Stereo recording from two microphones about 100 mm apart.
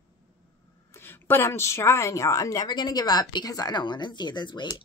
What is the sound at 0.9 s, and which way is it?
A woman's voice, 20° left (ahead or behind).